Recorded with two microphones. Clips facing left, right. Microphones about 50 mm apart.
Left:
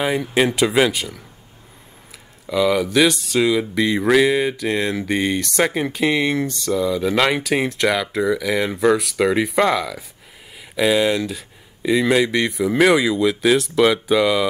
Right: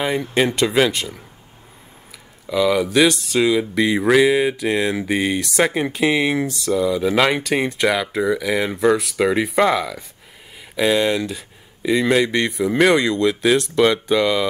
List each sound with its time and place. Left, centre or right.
0.0 s speech: centre
2.4 s speech: centre